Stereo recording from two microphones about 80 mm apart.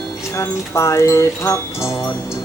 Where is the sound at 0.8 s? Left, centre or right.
Left.